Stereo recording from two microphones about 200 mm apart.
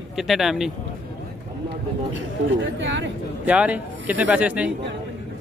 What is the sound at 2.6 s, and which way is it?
Speech, 65° right (ahead or behind).